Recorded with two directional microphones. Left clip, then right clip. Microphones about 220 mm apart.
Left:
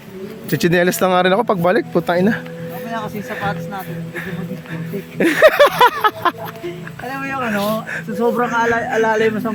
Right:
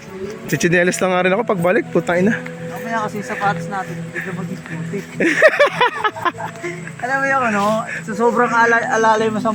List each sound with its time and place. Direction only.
0.5 s speech: 10° left (ahead or behind)
5.2 s speech: 15° left (ahead or behind)
8.5 s speech: 30° left (ahead or behind)
8.9 s speech: 10° left (ahead or behind)